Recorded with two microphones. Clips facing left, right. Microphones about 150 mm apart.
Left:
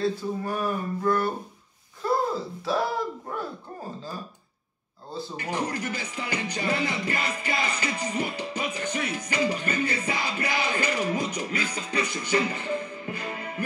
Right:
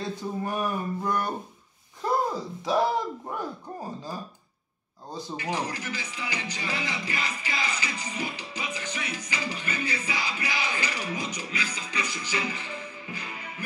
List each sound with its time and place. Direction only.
0.4 s speech: 20° right (ahead or behind)
2.3 s speech: 15° right (ahead or behind)
5.3 s speech: 55° left (ahead or behind)